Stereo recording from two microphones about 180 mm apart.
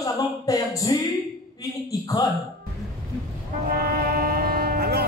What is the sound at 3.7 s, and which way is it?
Vehicle, 60° right (ahead or behind).